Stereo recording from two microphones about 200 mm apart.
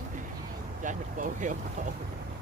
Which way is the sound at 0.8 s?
40° right (ahead or behind).